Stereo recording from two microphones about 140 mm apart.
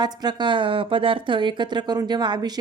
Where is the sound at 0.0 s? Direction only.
30° right (ahead or behind).